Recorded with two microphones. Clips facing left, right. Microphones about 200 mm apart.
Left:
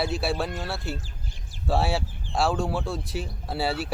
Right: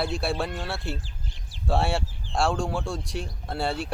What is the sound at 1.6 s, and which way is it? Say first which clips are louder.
Speech: even; centre (ahead or behind).